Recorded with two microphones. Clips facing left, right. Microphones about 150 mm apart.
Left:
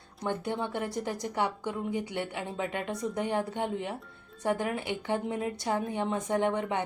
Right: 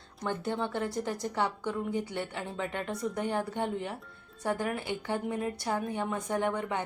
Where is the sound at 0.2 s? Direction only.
15° left (ahead or behind).